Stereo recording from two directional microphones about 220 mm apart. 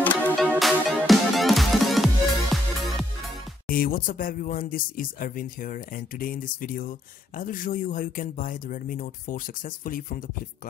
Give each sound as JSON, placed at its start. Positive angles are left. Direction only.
{"t": 0.0, "sound": "music", "side_deg": 5}
{"t": 3.6, "sound": "speech", "side_deg": 40}